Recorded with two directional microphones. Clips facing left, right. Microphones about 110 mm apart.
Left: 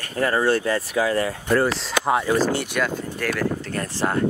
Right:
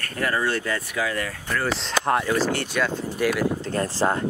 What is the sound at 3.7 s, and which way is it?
Speech, 25° right (ahead or behind).